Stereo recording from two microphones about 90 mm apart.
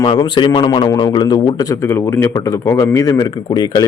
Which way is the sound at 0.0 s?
60° left (ahead or behind).